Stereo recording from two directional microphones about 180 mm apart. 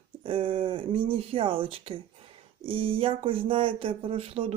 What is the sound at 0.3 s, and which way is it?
Speech, 30° right (ahead or behind).